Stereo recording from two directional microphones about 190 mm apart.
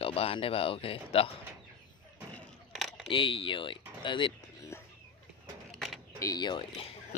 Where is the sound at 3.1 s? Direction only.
25° left (ahead or behind).